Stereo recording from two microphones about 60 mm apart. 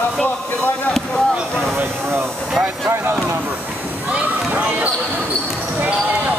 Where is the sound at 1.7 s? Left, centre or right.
Right.